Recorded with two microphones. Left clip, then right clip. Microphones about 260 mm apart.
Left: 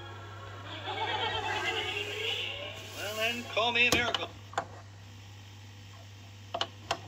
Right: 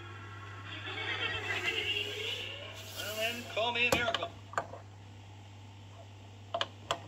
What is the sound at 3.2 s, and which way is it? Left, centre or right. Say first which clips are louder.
Speech: left 4 dB; centre.